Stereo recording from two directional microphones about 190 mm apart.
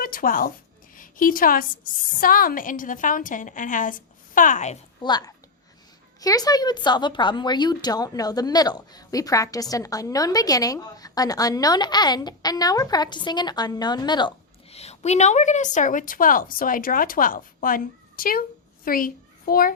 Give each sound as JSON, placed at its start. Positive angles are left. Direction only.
{"t": 0.0, "sound": "a woman's voice", "side_deg": 50}
{"t": 5.0, "sound": "a woman's voice", "side_deg": 20}